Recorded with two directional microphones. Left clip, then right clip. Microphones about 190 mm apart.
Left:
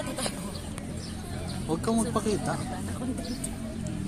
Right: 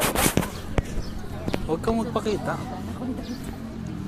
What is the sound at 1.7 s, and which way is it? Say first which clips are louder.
Speech: right 3 dB; 35° left (ahead or behind).